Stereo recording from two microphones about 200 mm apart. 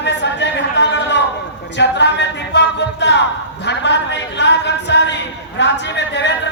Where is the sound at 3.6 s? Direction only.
60° left (ahead or behind).